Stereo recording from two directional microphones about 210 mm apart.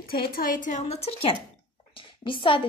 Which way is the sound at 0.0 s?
45° left (ahead or behind).